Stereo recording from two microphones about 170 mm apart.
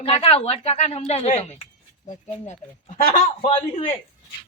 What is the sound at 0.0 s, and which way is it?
Speech, 35° left (ahead or behind).